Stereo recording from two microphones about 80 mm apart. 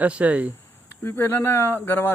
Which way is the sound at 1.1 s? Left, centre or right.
Left.